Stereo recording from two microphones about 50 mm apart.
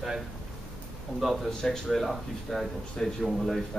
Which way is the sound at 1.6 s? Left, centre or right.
Centre.